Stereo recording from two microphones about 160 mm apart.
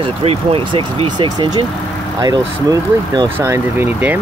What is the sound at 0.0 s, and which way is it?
Speech, 35° right (ahead or behind).